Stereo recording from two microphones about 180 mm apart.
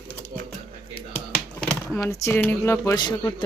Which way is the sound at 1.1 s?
5° left (ahead or behind).